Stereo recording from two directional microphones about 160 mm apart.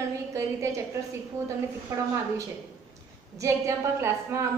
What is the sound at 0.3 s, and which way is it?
Speech, 20° right (ahead or behind).